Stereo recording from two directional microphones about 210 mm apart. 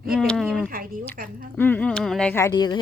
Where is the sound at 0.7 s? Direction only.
40° right (ahead or behind).